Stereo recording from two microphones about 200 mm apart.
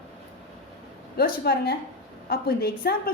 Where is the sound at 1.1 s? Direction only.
50° left (ahead or behind).